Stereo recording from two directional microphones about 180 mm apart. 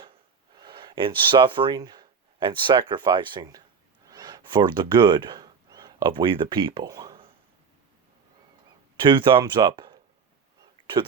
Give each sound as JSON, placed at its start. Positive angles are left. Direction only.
{"t": 0.5, "sound": "speech", "side_deg": -25}
{"t": 9.0, "sound": "speech", "side_deg": -25}